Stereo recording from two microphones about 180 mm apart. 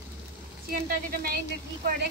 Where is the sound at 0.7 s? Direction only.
55° right (ahead or behind).